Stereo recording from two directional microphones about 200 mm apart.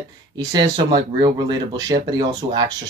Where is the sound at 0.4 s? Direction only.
20° right (ahead or behind).